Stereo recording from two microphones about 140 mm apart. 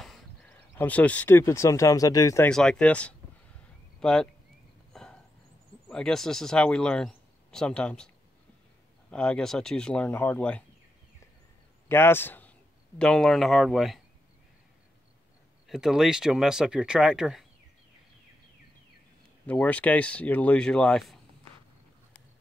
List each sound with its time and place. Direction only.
0.7 s speech: 10° left (ahead or behind)
2.4 s speech: 5° left (ahead or behind)
4.9 s a sound: 5° left (ahead or behind)
5.9 s speech: 5° left (ahead or behind)
9.1 s speech: 5° left (ahead or behind)
11.9 s speech: 15° left (ahead or behind); by 14.0 s centre (ahead or behind)
15.6 s speech: 5° right (ahead or behind)
19.4 s speech: 10° left (ahead or behind)